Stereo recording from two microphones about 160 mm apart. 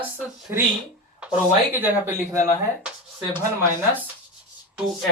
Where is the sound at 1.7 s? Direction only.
15° right (ahead or behind).